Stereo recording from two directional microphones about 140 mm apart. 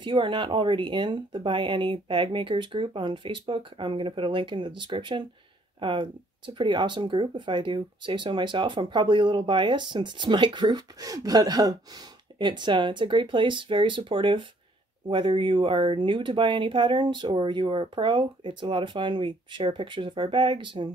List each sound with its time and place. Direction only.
0.0 s speech: 35° right (ahead or behind)